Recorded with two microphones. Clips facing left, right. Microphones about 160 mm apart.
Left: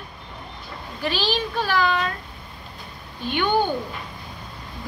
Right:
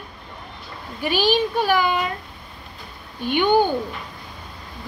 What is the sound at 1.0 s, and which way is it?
A woman's voice, 15° right (ahead or behind).